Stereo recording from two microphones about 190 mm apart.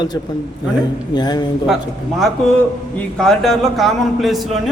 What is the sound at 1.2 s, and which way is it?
Speech, 20° left (ahead or behind).